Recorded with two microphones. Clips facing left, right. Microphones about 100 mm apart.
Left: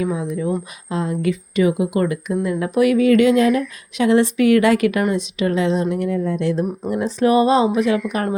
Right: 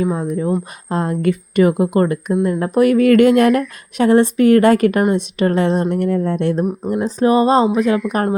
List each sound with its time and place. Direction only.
0.0 s speech: 45° right (ahead or behind)
6.9 s speech: 40° right (ahead or behind)